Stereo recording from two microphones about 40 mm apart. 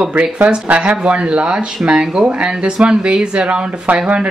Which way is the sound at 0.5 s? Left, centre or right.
Right.